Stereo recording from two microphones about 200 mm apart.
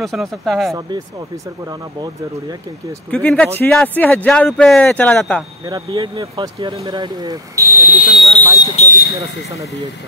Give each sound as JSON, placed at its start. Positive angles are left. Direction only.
{"t": 0.0, "sound": "speech", "side_deg": 0}
{"t": 3.1, "sound": "speech", "side_deg": 5}
{"t": 5.7, "sound": "speech", "side_deg": -20}
{"t": 8.7, "sound": "speech", "side_deg": 45}